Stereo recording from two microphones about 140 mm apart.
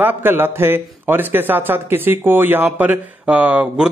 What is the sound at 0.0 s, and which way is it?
A man's voice, 15° right (ahead or behind).